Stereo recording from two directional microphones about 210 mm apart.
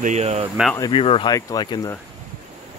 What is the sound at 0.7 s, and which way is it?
Speech, 20° left (ahead or behind).